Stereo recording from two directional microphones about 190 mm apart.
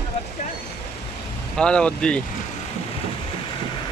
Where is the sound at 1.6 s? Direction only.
5° left (ahead or behind).